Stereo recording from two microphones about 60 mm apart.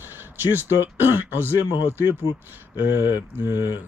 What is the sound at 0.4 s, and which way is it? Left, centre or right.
Speech, right.